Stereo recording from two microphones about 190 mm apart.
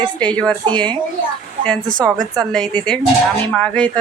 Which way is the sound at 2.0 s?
20° right (ahead or behind).